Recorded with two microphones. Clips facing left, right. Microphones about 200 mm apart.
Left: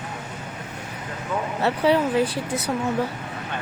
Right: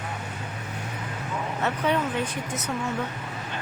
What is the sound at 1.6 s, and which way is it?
Speech, 35° left (ahead or behind).